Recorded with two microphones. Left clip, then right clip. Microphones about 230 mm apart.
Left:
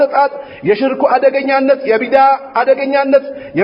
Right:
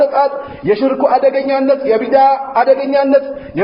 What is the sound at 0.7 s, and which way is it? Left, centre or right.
A man's voice, left.